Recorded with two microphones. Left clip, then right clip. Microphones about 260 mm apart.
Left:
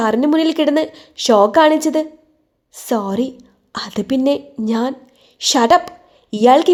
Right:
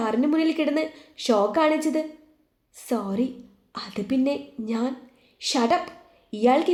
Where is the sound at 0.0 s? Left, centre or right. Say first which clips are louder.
Left 8 dB; left.